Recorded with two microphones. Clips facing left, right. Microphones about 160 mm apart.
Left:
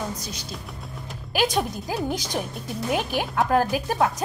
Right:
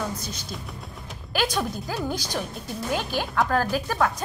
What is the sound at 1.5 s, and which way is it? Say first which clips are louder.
Speech: left 2 dB; 25° left (ahead or behind).